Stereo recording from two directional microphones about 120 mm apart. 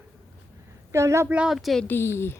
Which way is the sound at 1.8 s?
20° left (ahead or behind).